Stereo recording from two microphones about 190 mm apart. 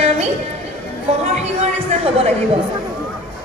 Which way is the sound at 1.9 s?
35° right (ahead or behind).